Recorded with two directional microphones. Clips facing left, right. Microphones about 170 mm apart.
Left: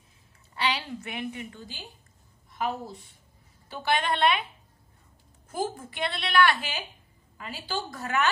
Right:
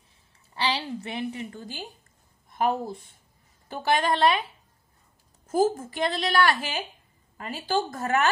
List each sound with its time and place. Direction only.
0.6 s a woman's voice: 30° right (ahead or behind)
2.5 s a woman's voice: 50° right (ahead or behind)
5.5 s a woman's voice: 40° right (ahead or behind)